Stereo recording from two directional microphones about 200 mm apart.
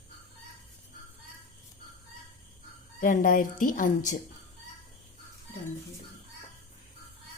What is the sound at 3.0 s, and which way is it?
A woman's voice, 40° left (ahead or behind).